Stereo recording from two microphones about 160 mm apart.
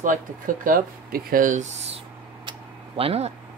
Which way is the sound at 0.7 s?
60° right (ahead or behind).